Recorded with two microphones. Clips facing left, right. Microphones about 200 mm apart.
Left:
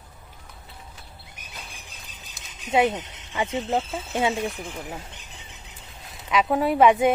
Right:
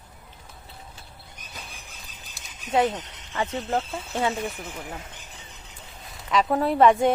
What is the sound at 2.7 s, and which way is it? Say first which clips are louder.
Speech: left 1 dB; 15° left (ahead or behind).